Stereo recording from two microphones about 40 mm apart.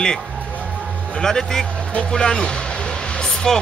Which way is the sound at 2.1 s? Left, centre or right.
Centre.